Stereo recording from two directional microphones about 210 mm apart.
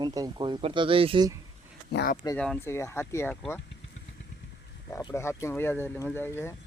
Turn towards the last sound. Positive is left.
turn(degrees=10)  # may be behind; listen again after turning